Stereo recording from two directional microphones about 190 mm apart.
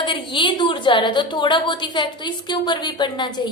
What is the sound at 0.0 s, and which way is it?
A woman's voice, 25° left (ahead or behind).